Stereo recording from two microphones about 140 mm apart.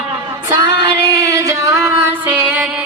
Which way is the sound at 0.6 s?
25° right (ahead or behind).